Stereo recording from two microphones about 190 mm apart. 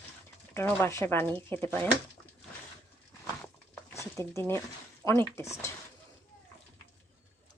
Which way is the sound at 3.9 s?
15° left (ahead or behind).